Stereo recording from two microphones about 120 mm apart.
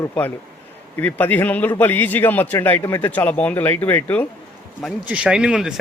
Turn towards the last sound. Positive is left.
turn(degrees=-5)  # may be behind; listen again after turning